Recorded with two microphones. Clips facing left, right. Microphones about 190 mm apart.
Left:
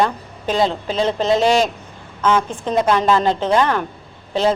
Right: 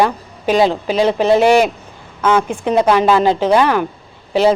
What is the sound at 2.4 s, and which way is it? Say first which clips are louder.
Speech: right 4 dB; 10° right (ahead or behind).